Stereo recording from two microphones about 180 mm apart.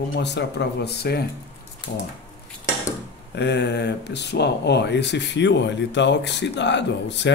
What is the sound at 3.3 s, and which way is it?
Speech, 70° left (ahead or behind).